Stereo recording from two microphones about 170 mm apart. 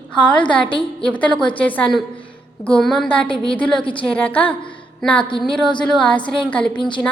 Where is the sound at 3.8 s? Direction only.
30° left (ahead or behind).